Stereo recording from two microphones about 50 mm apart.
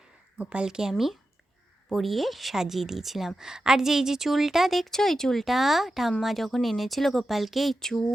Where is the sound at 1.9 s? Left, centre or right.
Centre.